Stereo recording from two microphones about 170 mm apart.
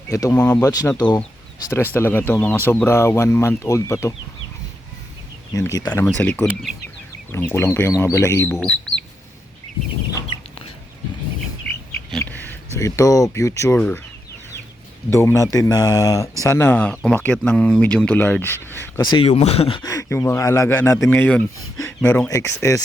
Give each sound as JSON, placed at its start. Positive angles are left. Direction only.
{"t": 0.1, "sound": "speech", "side_deg": 20}
{"t": 1.7, "sound": "speech", "side_deg": 15}
{"t": 5.5, "sound": "speech", "side_deg": 20}
{"t": 12.2, "sound": "speech", "side_deg": 10}
{"t": 15.1, "sound": "speech", "side_deg": 15}
{"t": 19.1, "sound": "speech", "side_deg": 40}
{"t": 19.8, "sound": "speech", "side_deg": 20}